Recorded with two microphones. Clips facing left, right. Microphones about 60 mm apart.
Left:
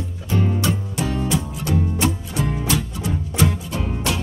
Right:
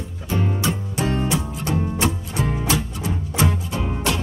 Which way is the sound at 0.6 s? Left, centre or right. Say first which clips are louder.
Even; right.